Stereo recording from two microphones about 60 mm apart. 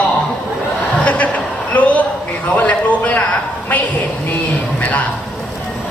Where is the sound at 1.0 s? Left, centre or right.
Left.